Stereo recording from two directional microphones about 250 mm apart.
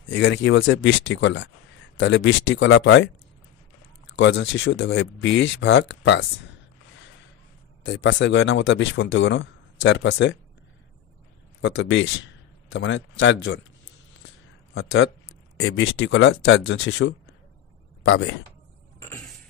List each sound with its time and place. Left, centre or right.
0.1 s speech: left
4.2 s speech: left
7.8 s speech: left
11.6 s speech: left
14.7 s speech: left